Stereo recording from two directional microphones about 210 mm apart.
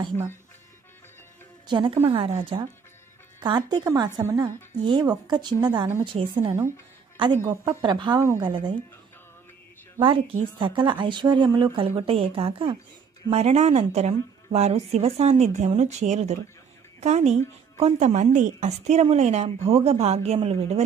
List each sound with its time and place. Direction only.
1.7 s speech: 25° right (ahead or behind)
9.9 s speech: 25° right (ahead or behind)